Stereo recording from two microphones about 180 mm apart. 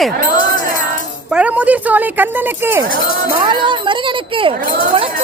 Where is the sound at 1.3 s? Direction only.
5° right (ahead or behind).